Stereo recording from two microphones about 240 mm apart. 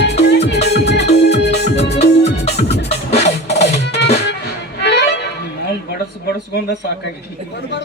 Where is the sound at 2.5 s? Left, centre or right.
Left.